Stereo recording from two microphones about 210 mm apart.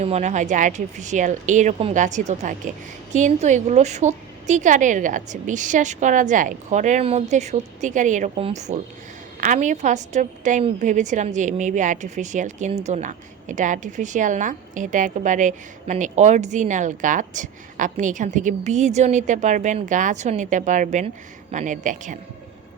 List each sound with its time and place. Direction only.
0.0 s a woman's voice: 30° right (ahead or behind)